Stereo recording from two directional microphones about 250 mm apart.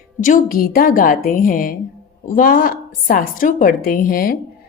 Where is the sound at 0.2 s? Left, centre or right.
Left.